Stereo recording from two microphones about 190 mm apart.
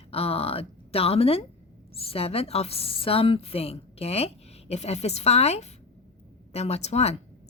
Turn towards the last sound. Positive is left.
turn(degrees=35)  # may be behind; listen again after turning